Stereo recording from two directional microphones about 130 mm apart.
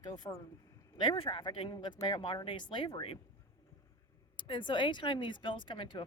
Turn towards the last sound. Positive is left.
turn(degrees=40)  # may be behind; listen again after turning